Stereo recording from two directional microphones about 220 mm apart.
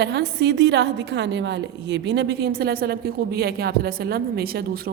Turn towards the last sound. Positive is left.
turn(degrees=-45)  # may be behind; listen again after turning